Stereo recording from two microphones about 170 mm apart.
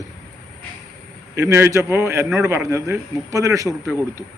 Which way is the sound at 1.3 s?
15° right (ahead or behind).